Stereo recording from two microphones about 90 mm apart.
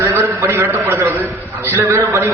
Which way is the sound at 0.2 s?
25° right (ahead or behind).